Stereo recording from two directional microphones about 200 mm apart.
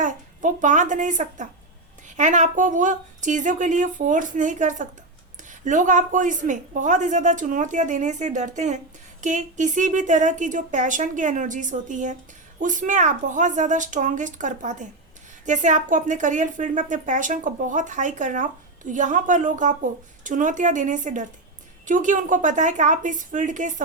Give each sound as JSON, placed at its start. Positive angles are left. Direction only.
{"t": 0.0, "sound": "a woman's voice", "side_deg": -40}